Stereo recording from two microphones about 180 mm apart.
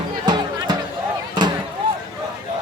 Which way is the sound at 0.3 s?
25° right (ahead or behind).